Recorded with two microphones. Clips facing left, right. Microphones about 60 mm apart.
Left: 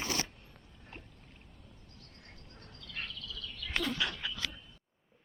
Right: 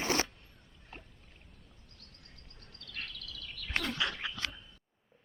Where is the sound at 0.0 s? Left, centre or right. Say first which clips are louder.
Right 5 dB; right.